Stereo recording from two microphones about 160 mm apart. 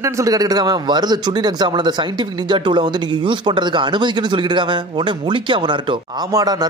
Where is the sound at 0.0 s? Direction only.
20° right (ahead or behind).